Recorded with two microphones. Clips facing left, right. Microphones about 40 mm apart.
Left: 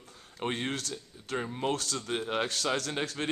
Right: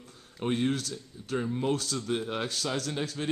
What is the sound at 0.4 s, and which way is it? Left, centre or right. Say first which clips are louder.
A man's voice: right 4 dB; centre.